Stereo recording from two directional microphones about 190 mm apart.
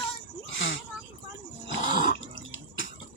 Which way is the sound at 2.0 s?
75° left (ahead or behind).